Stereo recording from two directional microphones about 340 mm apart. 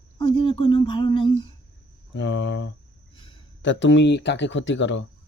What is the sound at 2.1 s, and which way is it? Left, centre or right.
Speech, left.